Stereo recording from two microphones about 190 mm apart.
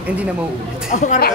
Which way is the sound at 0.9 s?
40° left (ahead or behind).